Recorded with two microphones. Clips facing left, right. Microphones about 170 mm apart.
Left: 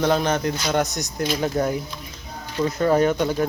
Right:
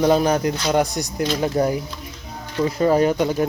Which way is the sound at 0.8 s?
35° right (ahead or behind).